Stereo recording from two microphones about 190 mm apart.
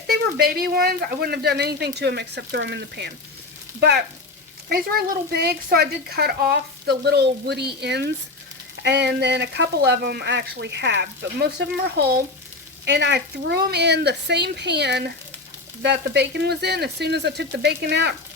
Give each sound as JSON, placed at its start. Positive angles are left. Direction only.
{"t": 0.1, "sound": "speech", "side_deg": -55}